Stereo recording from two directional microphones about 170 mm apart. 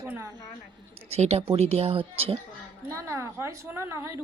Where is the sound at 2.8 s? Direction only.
20° right (ahead or behind).